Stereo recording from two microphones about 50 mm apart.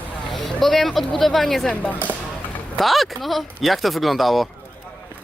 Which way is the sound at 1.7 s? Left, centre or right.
Left.